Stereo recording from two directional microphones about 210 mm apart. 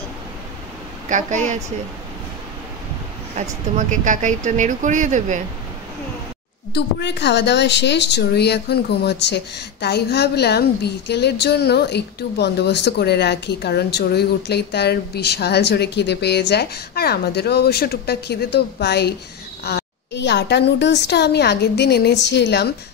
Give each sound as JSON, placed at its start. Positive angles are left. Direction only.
{"t": 1.0, "sound": "speech", "side_deg": -35}
{"t": 3.3, "sound": "speech", "side_deg": -35}
{"t": 6.7, "sound": "a woman's voice", "side_deg": 55}